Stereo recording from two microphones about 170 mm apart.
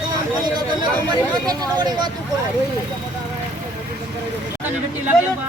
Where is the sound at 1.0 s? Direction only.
25° right (ahead or behind).